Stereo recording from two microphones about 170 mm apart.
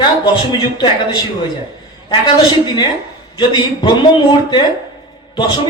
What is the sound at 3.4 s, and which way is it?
A woman's voice, 25° left (ahead or behind).